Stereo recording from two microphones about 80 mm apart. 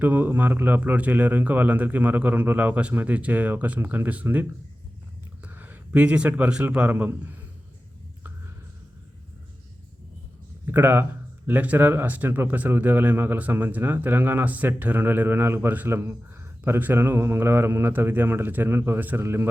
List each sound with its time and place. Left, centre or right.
0.0 s speech: right
5.5 s a man's voice: right
10.7 s speech: right